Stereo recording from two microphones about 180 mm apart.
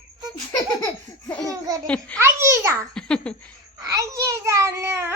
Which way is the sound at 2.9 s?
5° left (ahead or behind).